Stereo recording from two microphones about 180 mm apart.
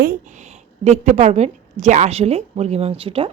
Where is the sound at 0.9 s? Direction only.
40° right (ahead or behind).